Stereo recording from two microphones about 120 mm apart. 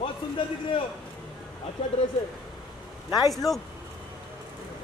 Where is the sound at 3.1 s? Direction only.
35° left (ahead or behind).